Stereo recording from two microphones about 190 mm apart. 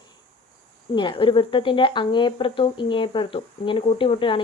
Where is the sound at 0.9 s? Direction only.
25° left (ahead or behind).